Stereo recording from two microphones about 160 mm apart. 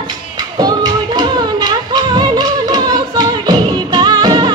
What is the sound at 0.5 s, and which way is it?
Music, 25° right (ahead or behind).